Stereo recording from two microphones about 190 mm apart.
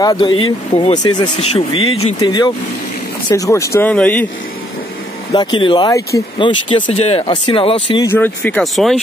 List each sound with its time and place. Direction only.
0.0 s speech: 20° left (ahead or behind)
5.3 s speech: 25° left (ahead or behind)
8.1 s speech: 10° left (ahead or behind)